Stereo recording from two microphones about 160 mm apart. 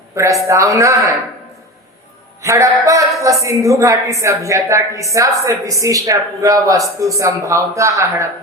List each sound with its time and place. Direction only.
0.2 s a man's voice: 20° right (ahead or behind)
2.4 s a man's voice: 20° right (ahead or behind)